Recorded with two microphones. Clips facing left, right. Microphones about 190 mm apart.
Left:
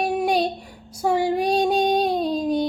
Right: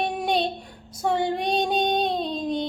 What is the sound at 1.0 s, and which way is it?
Child singing, 5° left (ahead or behind).